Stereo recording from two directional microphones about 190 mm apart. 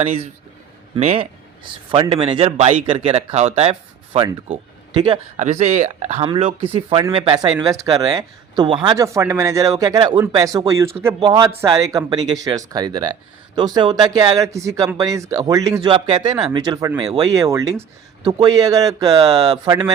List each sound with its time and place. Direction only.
0.0 s a man's voice: 30° right (ahead or behind)